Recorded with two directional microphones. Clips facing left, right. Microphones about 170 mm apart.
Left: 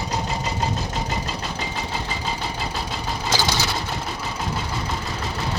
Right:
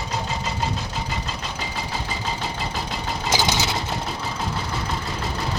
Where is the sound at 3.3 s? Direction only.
20° right (ahead or behind).